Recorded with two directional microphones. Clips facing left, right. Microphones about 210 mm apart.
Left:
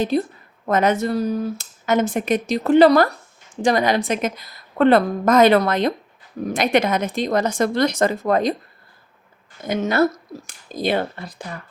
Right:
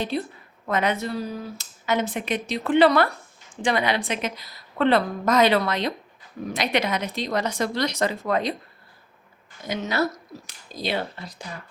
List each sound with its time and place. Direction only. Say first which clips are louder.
0.1 s speech: left 7 dB; 45° left (ahead or behind)
9.6 s speech: left 7 dB; 50° left (ahead or behind)